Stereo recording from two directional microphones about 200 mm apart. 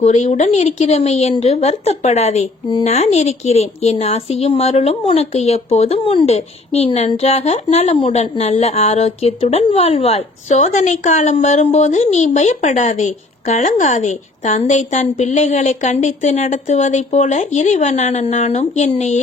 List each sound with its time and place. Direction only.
0.0 s speech: 35° left (ahead or behind)